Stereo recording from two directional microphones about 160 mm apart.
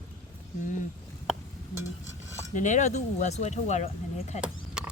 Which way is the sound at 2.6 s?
50° left (ahead or behind).